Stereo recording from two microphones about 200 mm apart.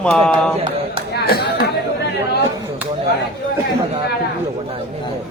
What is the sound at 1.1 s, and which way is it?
Speech, 55° left (ahead or behind).